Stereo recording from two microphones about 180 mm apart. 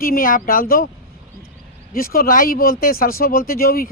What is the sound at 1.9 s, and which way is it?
Speech, 55° left (ahead or behind).